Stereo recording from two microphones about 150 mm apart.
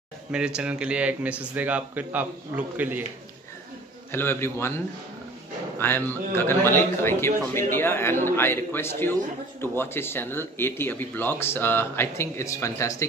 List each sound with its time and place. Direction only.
0.3 s speech: 5° right (ahead or behind)
4.1 s a man's voice: 15° left (ahead or behind)